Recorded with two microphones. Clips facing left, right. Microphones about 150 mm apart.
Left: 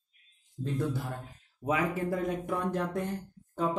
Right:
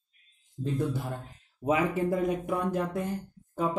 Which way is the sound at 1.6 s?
25° right (ahead or behind).